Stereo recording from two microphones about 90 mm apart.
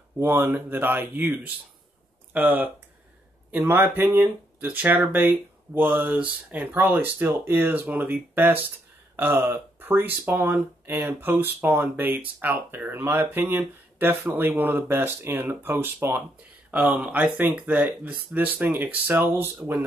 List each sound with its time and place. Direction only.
0.2 s speech: 20° right (ahead or behind)